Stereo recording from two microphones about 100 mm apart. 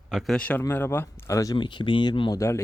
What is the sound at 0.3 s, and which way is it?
Speech, 15° left (ahead or behind).